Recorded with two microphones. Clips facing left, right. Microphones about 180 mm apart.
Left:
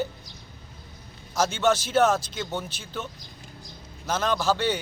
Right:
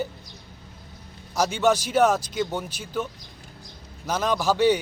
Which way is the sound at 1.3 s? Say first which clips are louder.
Right 2 dB; 15° right (ahead or behind).